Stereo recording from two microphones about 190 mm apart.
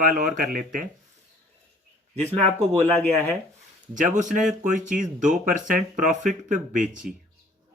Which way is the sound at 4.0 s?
45° right (ahead or behind).